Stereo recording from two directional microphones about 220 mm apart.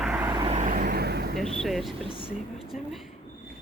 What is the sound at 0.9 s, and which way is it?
Speech, 50° right (ahead or behind).